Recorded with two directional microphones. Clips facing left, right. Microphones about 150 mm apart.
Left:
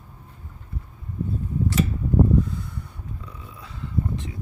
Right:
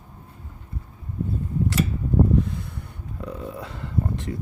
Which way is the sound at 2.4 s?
70° right (ahead or behind).